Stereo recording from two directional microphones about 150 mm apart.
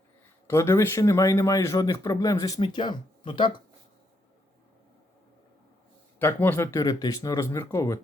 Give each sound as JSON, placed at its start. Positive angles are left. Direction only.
{"t": 0.4, "sound": "speech", "side_deg": 20}
{"t": 6.1, "sound": "speech", "side_deg": 15}